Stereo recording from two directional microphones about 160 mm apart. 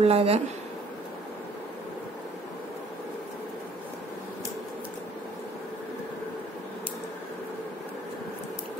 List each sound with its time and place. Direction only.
0.0 s a woman's voice: 40° right (ahead or behind)